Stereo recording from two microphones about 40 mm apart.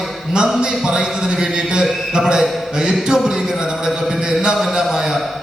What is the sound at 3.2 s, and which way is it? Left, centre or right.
Speech, centre.